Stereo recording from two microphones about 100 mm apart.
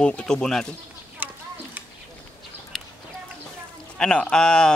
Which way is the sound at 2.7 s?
5° left (ahead or behind).